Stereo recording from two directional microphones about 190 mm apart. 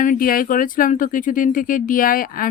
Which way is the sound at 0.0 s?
45° left (ahead or behind).